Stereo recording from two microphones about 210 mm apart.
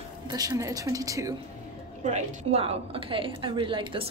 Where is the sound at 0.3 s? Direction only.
15° right (ahead or behind).